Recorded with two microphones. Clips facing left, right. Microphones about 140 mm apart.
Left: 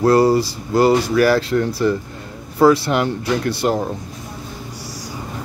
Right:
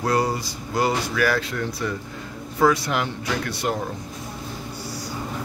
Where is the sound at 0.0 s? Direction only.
35° left (ahead or behind).